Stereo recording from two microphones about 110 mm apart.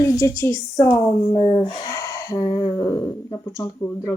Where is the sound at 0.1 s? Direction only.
25° left (ahead or behind).